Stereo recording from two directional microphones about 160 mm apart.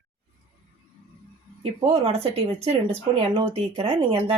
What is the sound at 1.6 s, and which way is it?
Speech, 35° right (ahead or behind).